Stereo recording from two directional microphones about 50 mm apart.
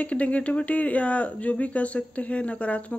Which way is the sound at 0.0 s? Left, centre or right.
Left.